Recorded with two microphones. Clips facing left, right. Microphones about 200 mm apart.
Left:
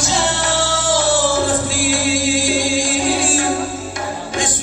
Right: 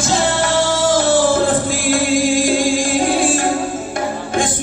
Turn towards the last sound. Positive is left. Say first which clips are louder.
# right 2 dB
turn(degrees=-55)  # may be behind; listen again after turning